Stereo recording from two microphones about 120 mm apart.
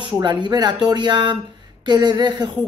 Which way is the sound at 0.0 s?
40° right (ahead or behind).